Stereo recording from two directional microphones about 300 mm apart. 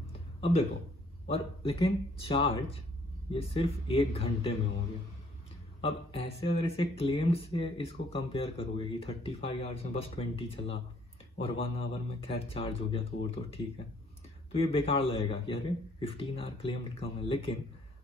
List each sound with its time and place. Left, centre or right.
0.0 s a sound: centre
1.3 s speech: centre
5.8 s a man's voice: centre